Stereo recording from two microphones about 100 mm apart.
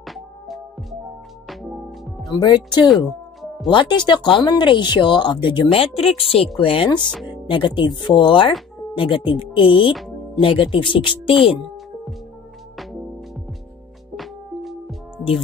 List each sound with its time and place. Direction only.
0.0 s music: centre (ahead or behind)
2.4 s speech: 45° left (ahead or behind)
9.9 s music: centre (ahead or behind)
10.4 s speech: 60° left (ahead or behind)
14.1 s music: centre (ahead or behind)